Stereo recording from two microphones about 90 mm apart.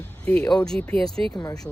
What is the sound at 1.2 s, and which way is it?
Speech, 20° left (ahead or behind).